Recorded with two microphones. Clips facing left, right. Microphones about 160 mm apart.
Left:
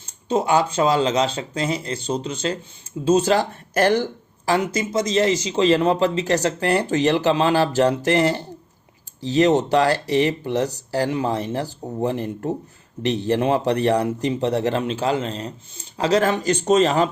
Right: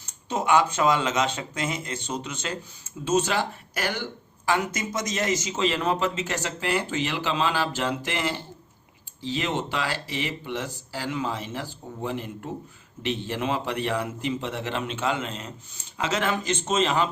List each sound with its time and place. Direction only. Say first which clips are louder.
0.0 s a man's voice: left 7 dB; 30° left (ahead or behind)